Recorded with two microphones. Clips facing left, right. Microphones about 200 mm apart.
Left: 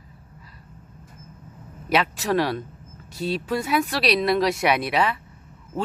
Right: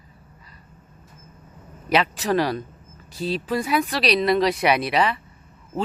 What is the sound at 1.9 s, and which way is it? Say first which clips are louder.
Speech: right 1 dB; centre (ahead or behind).